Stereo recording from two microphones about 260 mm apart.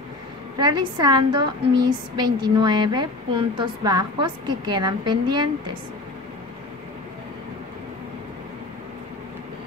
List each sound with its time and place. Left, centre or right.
0.6 s a woman's voice: centre